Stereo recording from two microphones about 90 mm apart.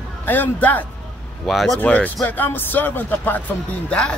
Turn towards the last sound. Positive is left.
turn(degrees=10)  # may be behind; listen again after turning